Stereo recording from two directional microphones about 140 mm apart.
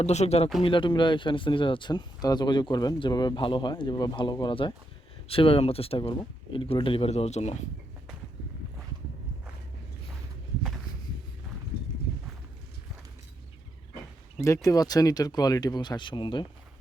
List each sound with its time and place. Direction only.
0.0 s speech: 50° left (ahead or behind)
0.6 s speech: 35° left (ahead or behind); by 7.6 s 50° left (ahead or behind)
14.4 s speech: 20° left (ahead or behind)